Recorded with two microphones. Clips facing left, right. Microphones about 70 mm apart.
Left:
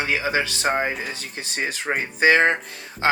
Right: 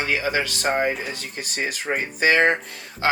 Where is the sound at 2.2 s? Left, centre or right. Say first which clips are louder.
Left 1 dB; left.